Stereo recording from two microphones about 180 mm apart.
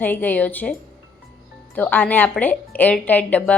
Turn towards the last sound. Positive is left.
turn(degrees=10)  # may be behind; listen again after turning